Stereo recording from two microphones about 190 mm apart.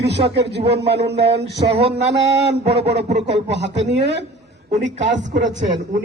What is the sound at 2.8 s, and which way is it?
A man's voice, 60° right (ahead or behind).